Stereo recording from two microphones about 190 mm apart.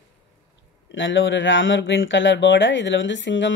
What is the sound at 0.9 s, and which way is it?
Speech, 75° left (ahead or behind).